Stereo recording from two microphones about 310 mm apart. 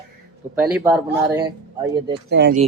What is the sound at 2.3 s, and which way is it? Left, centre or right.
Speech, right.